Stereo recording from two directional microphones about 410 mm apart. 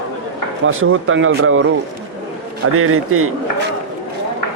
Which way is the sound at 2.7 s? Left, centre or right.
Right.